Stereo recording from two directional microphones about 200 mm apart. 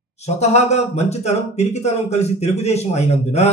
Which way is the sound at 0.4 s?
35° left (ahead or behind).